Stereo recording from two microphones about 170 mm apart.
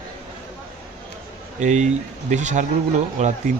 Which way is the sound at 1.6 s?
45° right (ahead or behind).